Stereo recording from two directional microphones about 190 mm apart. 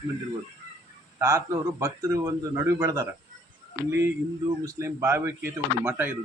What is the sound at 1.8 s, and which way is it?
Speech, 15° right (ahead or behind).